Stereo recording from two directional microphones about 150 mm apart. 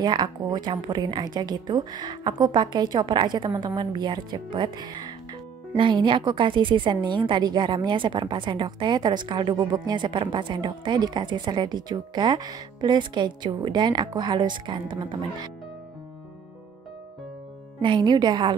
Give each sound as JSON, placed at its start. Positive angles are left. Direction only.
{"t": 0.0, "sound": "a woman's voice", "side_deg": -30}
{"t": 17.8, "sound": "a woman's voice", "side_deg": -30}